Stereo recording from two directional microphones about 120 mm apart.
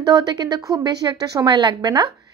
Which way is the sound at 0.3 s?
35° right (ahead or behind).